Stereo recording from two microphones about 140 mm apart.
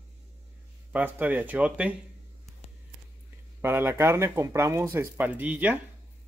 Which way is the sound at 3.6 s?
15° right (ahead or behind).